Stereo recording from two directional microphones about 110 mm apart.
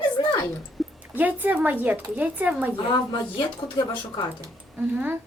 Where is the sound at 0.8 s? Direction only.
Centre (ahead or behind).